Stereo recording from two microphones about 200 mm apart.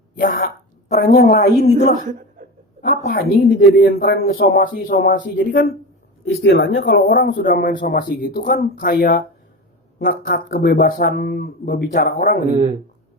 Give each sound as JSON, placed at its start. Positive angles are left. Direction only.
{"t": 0.2, "sound": "speech", "side_deg": 45}
{"t": 3.1, "sound": "speech", "side_deg": 50}
{"t": 6.2, "sound": "speech", "side_deg": 65}
{"t": 6.7, "sound": "speech", "side_deg": 50}